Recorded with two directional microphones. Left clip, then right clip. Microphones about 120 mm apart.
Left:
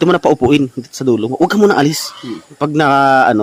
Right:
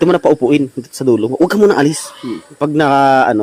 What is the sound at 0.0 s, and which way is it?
Speech, 35° left (ahead or behind).